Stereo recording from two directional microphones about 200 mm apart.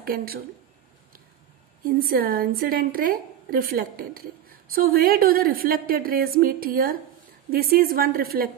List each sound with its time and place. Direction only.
0.0 s a woman's voice: 50° right (ahead or behind)
1.9 s a woman's voice: 50° right (ahead or behind)